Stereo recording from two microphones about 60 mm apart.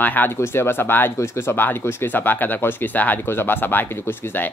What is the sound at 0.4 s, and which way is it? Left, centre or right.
Speech, left.